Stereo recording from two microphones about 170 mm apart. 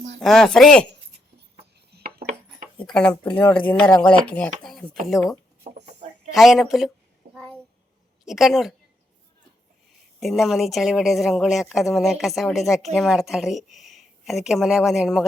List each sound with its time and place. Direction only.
0.2 s a woman's voice: centre (ahead or behind)
1.9 s a sound: 70° right (ahead or behind)
2.7 s a woman's voice: 5° left (ahead or behind)
5.6 s speech: 45° right (ahead or behind)
6.3 s a woman's voice: centre (ahead or behind)
7.3 s a sound: 5° left (ahead or behind)
8.2 s a woman's voice: centre (ahead or behind)
10.2 s a woman's voice: centre (ahead or behind)